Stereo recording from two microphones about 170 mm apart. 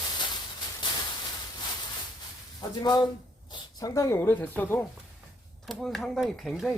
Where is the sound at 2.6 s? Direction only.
25° left (ahead or behind).